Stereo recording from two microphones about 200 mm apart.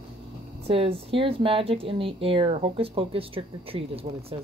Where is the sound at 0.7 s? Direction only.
25° right (ahead or behind).